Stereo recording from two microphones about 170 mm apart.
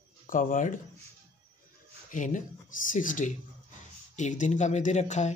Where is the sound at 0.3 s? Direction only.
50° left (ahead or behind).